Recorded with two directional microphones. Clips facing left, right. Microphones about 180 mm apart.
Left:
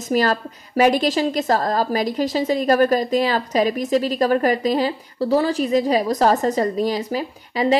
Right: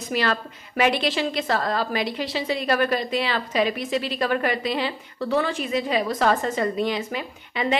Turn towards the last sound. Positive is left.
turn(degrees=35)  # may be behind; listen again after turning